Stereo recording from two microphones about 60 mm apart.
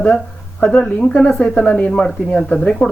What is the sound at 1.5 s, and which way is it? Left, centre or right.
Speech, left.